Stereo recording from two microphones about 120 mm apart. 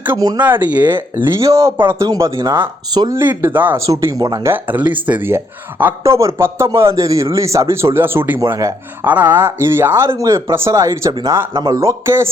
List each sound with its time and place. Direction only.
0.2 s speech: 35° right (ahead or behind)
0.4 s speech: 15° right (ahead or behind)
2.9 s speech: 35° right (ahead or behind)
3.2 s speech: 20° right (ahead or behind)
3.8 s speech: 30° right (ahead or behind)
4.5 s speech: 15° right (ahead or behind)
9.0 s speech: 15° right (ahead or behind)